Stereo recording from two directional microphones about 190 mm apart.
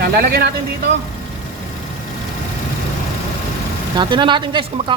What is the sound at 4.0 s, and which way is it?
Speech, 25° right (ahead or behind).